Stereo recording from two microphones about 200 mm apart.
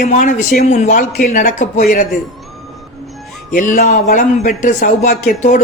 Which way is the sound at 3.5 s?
40° left (ahead or behind).